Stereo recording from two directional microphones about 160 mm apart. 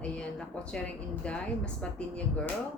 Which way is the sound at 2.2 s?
10° left (ahead or behind).